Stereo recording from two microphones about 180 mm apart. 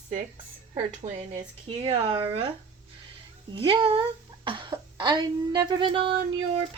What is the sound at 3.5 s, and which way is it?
A child's voice, 30° right (ahead or behind).